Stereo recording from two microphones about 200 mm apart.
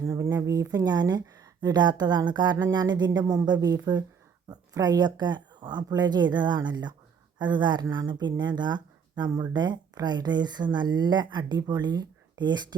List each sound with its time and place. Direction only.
0.0 s speech: 15° right (ahead or behind)